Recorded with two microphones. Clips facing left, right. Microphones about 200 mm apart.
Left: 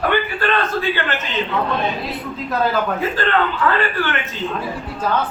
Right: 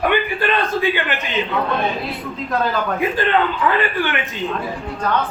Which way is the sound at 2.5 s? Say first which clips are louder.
Left 1 dB; centre (ahead or behind).